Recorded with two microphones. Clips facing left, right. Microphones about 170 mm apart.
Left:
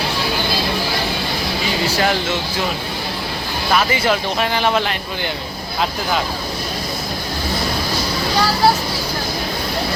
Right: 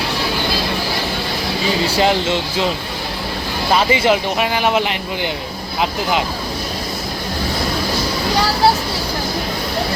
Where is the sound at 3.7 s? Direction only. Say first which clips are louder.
Right 3 dB; 20° right (ahead or behind).